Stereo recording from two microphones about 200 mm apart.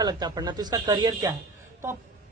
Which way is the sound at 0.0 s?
20° right (ahead or behind).